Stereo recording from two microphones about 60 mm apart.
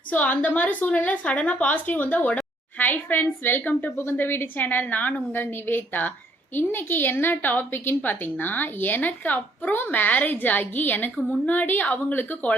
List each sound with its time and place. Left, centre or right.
0.1 s a woman's voice: left